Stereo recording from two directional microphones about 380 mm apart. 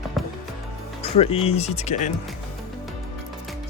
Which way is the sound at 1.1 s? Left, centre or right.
Centre.